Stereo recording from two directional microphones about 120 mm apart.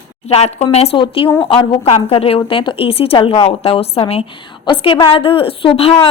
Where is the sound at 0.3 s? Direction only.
65° left (ahead or behind).